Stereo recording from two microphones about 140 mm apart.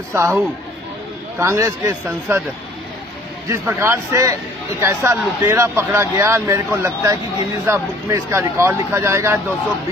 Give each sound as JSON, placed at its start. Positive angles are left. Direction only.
{"t": 0.1, "sound": "a man's voice", "side_deg": -20}
{"t": 1.4, "sound": "a man's voice", "side_deg": -20}
{"t": 3.4, "sound": "a man's voice", "side_deg": -20}